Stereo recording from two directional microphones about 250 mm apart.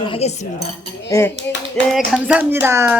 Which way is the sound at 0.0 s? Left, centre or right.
Left.